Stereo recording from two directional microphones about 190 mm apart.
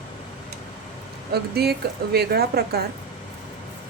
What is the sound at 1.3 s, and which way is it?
Speech, 55° right (ahead or behind).